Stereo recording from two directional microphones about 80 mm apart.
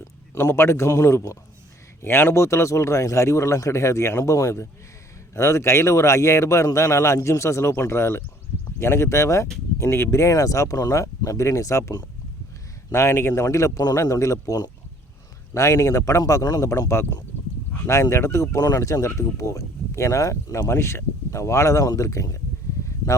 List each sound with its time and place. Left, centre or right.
0.3 s speech: left
17.8 s speech: left